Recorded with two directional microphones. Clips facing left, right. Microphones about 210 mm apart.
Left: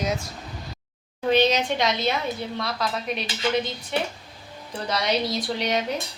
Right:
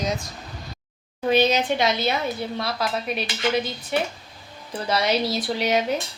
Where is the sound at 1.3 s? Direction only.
5° right (ahead or behind).